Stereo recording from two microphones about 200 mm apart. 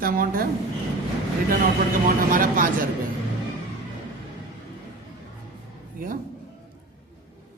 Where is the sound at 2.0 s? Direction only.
45° right (ahead or behind).